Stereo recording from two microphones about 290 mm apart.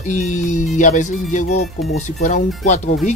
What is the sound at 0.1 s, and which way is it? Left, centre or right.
Speech, left.